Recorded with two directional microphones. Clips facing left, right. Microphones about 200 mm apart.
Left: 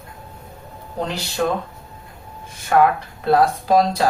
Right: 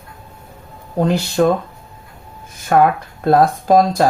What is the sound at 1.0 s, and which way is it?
Speech, 45° right (ahead or behind).